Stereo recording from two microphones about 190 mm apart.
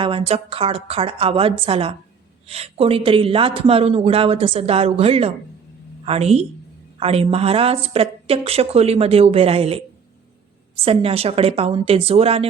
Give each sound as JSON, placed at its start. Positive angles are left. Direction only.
{"t": 0.0, "sound": "a woman's voice", "side_deg": -30}